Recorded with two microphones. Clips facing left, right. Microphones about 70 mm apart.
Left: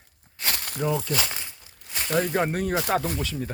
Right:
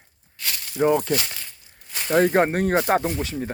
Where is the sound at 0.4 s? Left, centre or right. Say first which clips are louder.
Left 2 dB; left.